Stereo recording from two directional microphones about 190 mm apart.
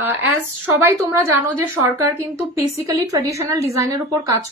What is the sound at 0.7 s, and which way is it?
Speech, 10° right (ahead or behind).